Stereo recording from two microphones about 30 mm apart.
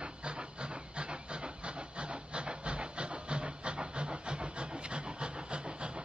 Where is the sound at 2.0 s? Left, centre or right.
Right.